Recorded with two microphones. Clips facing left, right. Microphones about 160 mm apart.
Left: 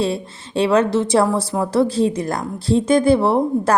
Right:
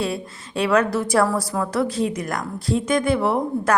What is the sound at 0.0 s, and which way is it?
A woman's voice, 30° left (ahead or behind).